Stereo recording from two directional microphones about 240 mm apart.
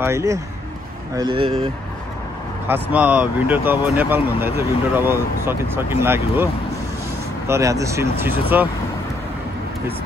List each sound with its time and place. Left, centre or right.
0.0 s speech: centre
2.7 s speech: centre